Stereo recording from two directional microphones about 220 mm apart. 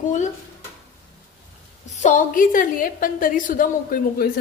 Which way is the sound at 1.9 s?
35° left (ahead or behind).